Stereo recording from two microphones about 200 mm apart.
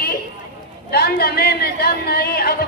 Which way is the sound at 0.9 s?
50° left (ahead or behind).